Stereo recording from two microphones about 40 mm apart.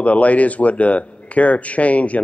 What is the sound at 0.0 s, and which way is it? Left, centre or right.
A man's voice, left.